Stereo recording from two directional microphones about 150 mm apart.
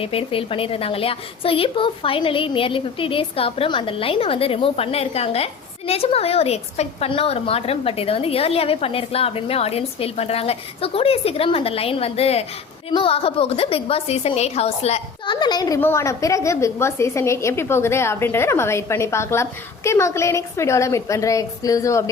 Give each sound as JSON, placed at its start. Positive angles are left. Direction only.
{"t": 0.0, "sound": "a woman's voice", "side_deg": 40}
{"t": 15.3, "sound": "a woman's voice", "side_deg": 30}